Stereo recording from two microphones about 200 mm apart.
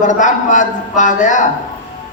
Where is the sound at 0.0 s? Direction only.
40° left (ahead or behind).